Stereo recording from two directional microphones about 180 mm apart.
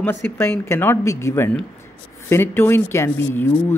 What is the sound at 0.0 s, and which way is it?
Speech, 10° left (ahead or behind).